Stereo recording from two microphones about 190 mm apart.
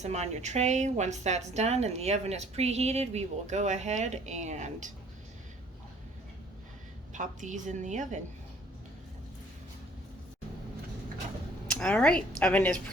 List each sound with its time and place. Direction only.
0.0 s a woman's voice: 35° right (ahead or behind)
7.1 s a woman's voice: 40° right (ahead or behind)
11.7 s speech: 5° left (ahead or behind)